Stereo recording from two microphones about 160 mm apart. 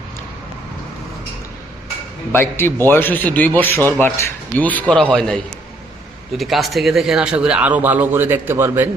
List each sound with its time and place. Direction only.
2.3 s a man's voice: 15° left (ahead or behind); by 8.9 s 15° right (ahead or behind)